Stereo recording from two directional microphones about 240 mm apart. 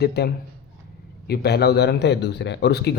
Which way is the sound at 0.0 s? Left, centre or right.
Left.